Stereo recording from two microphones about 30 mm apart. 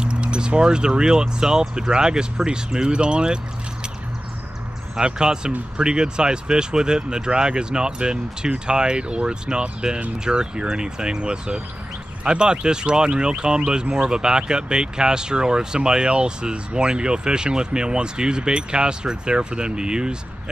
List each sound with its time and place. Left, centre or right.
0.0 s speech: right
4.9 s speech: right